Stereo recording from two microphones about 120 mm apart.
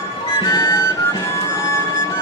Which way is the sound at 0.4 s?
30° left (ahead or behind).